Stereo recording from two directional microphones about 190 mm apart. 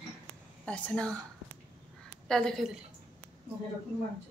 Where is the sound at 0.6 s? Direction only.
5° left (ahead or behind).